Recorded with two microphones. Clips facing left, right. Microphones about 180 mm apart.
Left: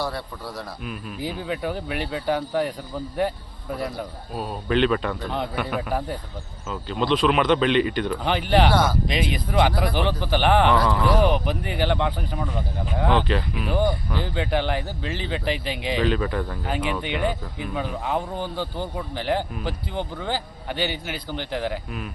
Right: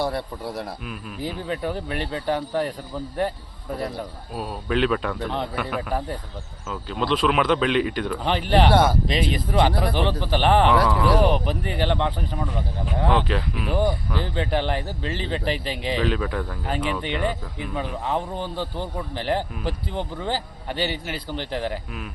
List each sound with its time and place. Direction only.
0.0 s a man's voice: 20° right (ahead or behind)
0.9 s speech: centre (ahead or behind)
3.8 s speech: centre (ahead or behind)
8.7 s a man's voice: 25° right (ahead or behind)
9.3 s speech: centre (ahead or behind)
15.4 s a man's voice: 35° right (ahead or behind)
15.9 s speech: centre (ahead or behind)